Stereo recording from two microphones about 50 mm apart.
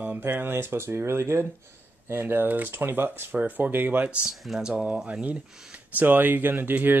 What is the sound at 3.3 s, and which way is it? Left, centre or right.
Speech, right.